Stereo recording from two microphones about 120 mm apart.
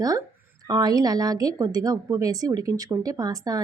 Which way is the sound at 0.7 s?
35° right (ahead or behind).